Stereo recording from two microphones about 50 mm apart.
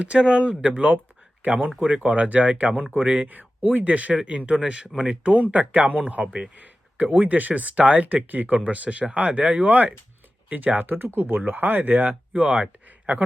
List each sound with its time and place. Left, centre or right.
0.0 s speech: right
6.6 s speech: right
12.3 s speech: right